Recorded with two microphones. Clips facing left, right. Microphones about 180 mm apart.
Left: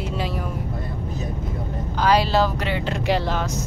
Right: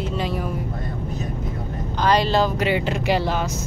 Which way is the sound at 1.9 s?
5° left (ahead or behind).